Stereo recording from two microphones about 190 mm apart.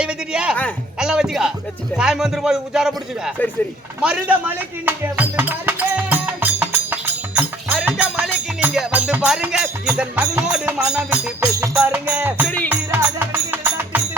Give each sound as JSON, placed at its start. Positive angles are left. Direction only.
{"t": 0.0, "sound": "a sound", "side_deg": -5}
{"t": 0.9, "sound": "music", "side_deg": -5}
{"t": 2.0, "sound": "speech", "side_deg": -5}
{"t": 4.0, "sound": "a sound", "side_deg": -5}
{"t": 7.9, "sound": "music", "side_deg": -5}
{"t": 10.5, "sound": "speech", "side_deg": -5}
{"t": 11.5, "sound": "music", "side_deg": -15}